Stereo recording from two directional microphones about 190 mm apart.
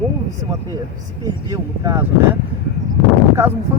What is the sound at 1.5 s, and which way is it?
Speech, 15° right (ahead or behind).